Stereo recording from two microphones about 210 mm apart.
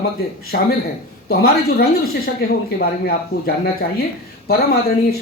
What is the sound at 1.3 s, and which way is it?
Speech, 45° left (ahead or behind).